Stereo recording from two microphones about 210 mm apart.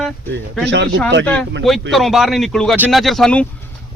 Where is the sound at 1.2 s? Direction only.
5° left (ahead or behind).